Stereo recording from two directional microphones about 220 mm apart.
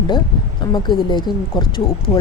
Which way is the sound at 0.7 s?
20° left (ahead or behind).